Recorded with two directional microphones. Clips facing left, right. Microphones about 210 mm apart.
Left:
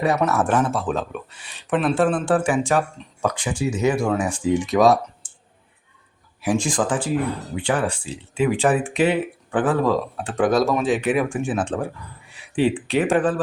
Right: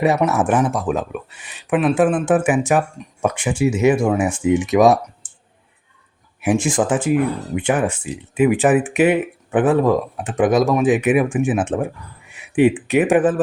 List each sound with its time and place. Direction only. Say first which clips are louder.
0.0 s speech: right 3 dB; 20° right (ahead or behind)
6.4 s speech: right 4 dB; 20° right (ahead or behind)
12.9 s speech: right 4 dB; 15° right (ahead or behind)